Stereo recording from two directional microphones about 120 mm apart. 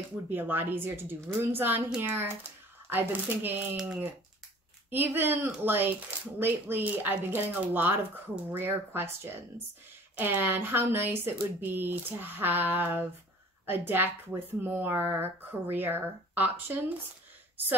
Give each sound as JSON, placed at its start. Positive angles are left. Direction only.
{"t": 0.3, "sound": "speech", "side_deg": -15}